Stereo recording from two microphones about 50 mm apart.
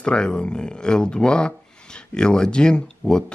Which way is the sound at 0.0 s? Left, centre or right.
Centre.